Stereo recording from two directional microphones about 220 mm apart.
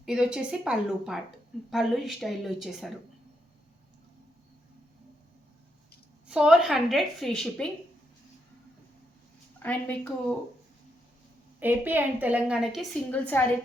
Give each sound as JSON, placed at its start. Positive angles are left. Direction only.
{"t": 0.0, "sound": "a woman's voice", "side_deg": -5}
{"t": 6.2, "sound": "a woman's voice", "side_deg": -5}
{"t": 9.6, "sound": "a woman's voice", "side_deg": 5}
{"t": 11.6, "sound": "a woman's voice", "side_deg": -10}